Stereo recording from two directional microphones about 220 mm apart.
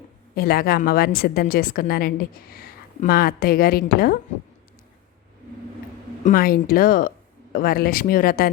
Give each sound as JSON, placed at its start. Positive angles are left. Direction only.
{"t": 0.3, "sound": "a woman's voice", "side_deg": 45}
{"t": 6.2, "sound": "speech", "side_deg": 40}